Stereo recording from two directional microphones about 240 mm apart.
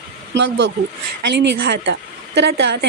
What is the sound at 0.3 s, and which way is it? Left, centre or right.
A woman's voice, right.